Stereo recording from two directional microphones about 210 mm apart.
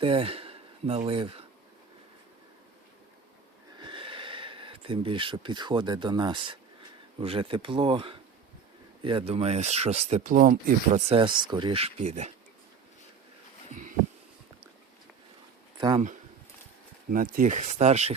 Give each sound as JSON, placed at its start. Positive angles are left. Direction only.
{"t": 0.0, "sound": "speech", "side_deg": -25}
{"t": 3.8, "sound": "sniff", "side_deg": -25}
{"t": 7.2, "sound": "speech", "side_deg": -25}
{"t": 17.1, "sound": "speech", "side_deg": -40}